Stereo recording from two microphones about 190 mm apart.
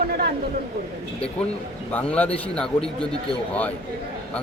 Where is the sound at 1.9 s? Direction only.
10° left (ahead or behind).